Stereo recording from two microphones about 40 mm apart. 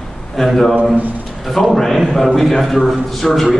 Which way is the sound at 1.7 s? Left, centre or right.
Centre.